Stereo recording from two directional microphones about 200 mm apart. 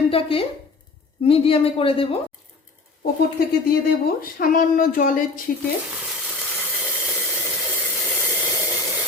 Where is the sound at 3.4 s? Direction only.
50° left (ahead or behind).